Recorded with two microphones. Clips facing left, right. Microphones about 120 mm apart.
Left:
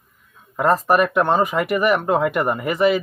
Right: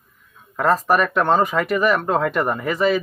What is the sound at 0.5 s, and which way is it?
Speech, 15° left (ahead or behind).